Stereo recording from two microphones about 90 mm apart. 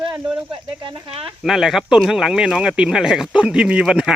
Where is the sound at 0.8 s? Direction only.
70° right (ahead or behind).